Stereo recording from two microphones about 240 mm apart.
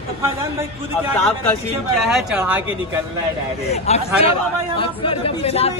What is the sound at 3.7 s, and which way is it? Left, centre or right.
Speech, left.